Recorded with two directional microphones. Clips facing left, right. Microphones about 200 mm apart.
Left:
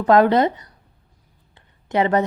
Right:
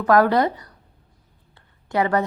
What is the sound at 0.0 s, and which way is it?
A woman's voice, 20° left (ahead or behind).